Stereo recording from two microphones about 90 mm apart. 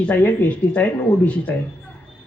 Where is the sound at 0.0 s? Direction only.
20° left (ahead or behind).